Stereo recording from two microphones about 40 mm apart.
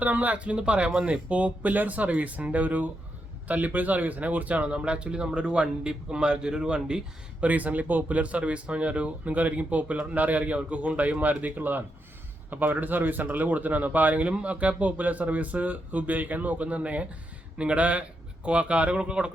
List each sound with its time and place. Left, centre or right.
0.0 s speech: right
7.4 s speech: right